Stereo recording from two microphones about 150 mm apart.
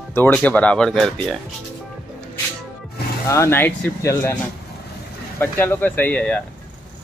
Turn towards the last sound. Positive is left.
turn(degrees=10)  # may be behind; listen again after turning